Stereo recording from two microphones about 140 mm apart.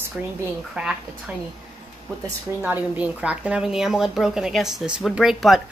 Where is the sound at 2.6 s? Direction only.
15° right (ahead or behind).